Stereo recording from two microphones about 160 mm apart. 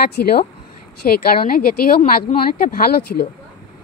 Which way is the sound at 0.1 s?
80° left.